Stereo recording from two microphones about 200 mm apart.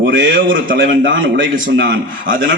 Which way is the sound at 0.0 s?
60° right (ahead or behind).